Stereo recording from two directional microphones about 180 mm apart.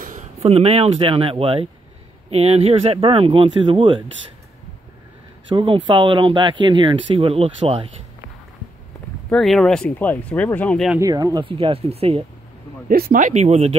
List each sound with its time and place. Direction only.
0.0 s speech: 40° right (ahead or behind)
5.5 s speech: 25° right (ahead or behind)
9.3 s speech: centre (ahead or behind)
11.0 s speech: 20° right (ahead or behind)
12.8 s speech: 55° right (ahead or behind); by 13.7 s 35° right (ahead or behind)